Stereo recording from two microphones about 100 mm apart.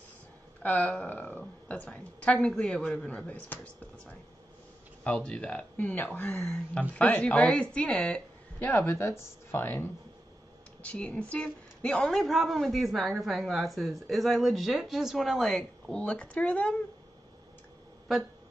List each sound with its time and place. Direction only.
0.6 s a woman's voice: 15° left (ahead or behind)
5.0 s a woman's voice: 10° left (ahead or behind)
8.7 s a woman's voice: 30° left (ahead or behind); by 16.0 s centre (ahead or behind)
16.0 s a woman's voice: 10° left (ahead or behind)